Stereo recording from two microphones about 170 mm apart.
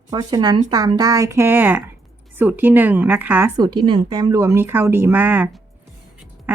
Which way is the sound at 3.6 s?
25° right (ahead or behind).